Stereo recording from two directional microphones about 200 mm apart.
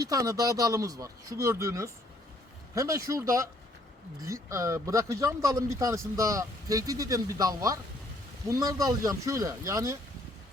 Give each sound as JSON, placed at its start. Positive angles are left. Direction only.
{"t": 0.0, "sound": "speech", "side_deg": -15}